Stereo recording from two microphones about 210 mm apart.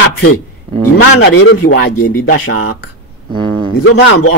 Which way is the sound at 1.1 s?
55° left (ahead or behind).